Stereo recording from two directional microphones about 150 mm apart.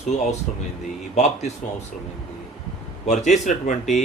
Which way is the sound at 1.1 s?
50° left (ahead or behind).